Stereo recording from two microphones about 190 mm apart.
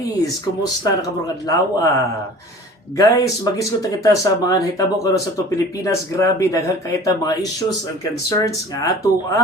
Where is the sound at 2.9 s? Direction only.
20° left (ahead or behind).